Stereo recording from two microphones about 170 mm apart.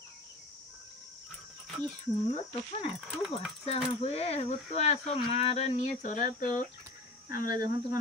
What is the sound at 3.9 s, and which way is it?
Speech, 35° left (ahead or behind).